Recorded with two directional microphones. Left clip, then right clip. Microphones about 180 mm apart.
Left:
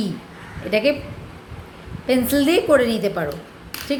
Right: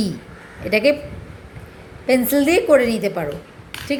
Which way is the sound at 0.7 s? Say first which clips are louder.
Right 2 dB; 25° right (ahead or behind).